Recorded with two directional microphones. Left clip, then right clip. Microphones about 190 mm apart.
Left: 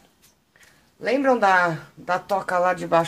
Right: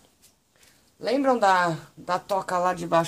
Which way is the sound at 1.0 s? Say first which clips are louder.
Left 3 dB; 15° right (ahead or behind).